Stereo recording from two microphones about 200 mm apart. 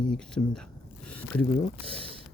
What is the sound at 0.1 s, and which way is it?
Speech, 5° left (ahead or behind).